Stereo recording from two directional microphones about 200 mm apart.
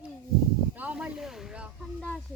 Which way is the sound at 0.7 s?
5° right (ahead or behind).